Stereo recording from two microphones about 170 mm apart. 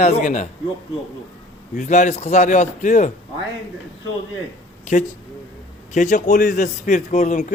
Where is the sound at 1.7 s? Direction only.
45° left (ahead or behind).